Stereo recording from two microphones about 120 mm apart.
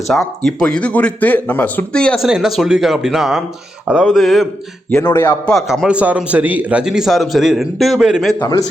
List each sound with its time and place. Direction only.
0.1 s speech: 5° left (ahead or behind)
2.2 s a man's voice: 5° right (ahead or behind)
5.1 s a man's voice: 20° left (ahead or behind)
5.5 s a man's voice: centre (ahead or behind)